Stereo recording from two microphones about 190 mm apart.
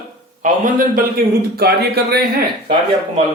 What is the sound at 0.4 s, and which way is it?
A man's voice, 45° right (ahead or behind).